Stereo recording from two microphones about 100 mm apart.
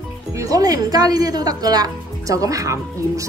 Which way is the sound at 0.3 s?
35° right (ahead or behind).